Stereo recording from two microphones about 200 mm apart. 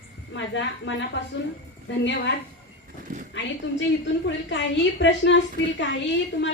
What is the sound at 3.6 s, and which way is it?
A woman's voice, 65° left (ahead or behind).